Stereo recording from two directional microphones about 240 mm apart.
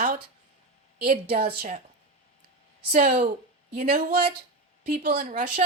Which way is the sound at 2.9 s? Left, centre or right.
Right.